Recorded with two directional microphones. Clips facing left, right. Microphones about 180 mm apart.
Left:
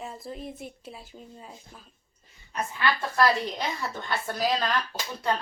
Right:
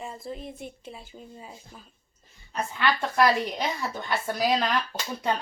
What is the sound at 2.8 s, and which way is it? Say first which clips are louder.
A woman's voice: right 1 dB; 20° right (ahead or behind).